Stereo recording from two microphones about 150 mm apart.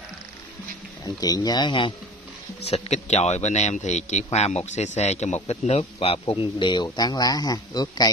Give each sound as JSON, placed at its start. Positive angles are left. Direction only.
{"t": 1.0, "sound": "speech", "side_deg": 25}
{"t": 2.6, "sound": "a man's voice", "side_deg": 45}